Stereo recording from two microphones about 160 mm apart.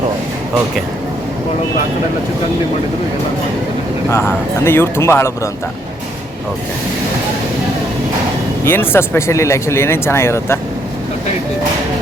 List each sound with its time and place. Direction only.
4.1 s speech: 15° left (ahead or behind)
8.6 s speech: 15° left (ahead or behind)